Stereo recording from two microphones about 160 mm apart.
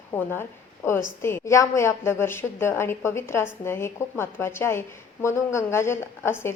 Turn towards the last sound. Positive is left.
turn(degrees=15)  # may be behind; listen again after turning